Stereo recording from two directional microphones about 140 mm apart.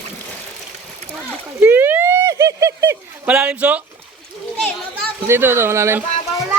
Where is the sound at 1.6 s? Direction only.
15° right (ahead or behind).